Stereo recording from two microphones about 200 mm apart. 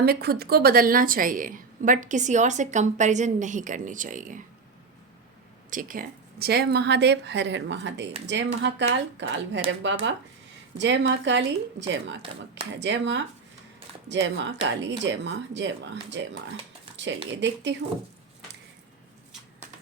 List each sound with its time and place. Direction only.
0.0 s a woman's voice: 50° right (ahead or behind)
5.7 s speech: 45° right (ahead or behind); by 17.7 s 65° right (ahead or behind)